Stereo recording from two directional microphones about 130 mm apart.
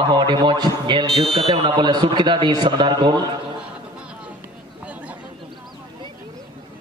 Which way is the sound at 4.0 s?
10° right (ahead or behind).